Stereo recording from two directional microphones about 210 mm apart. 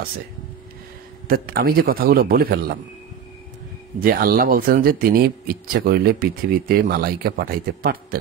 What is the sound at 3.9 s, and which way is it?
Speech, 45° right (ahead or behind).